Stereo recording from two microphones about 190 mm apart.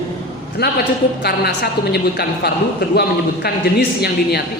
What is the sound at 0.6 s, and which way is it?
A woman's voice, 55° left (ahead or behind).